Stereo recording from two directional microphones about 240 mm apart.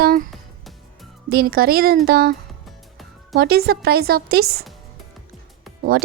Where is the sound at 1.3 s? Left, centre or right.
Right.